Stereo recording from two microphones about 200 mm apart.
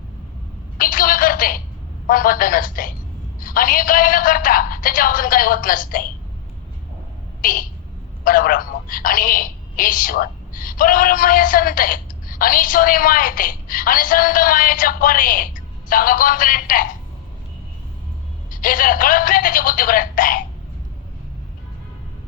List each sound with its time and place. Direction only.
0.8 s telephone: 45° left (ahead or behind)
2.0 s a woman's voice: 45° left (ahead or behind)
7.4 s a woman's voice: 45° left (ahead or behind)
18.5 s a woman's voice: 45° left (ahead or behind)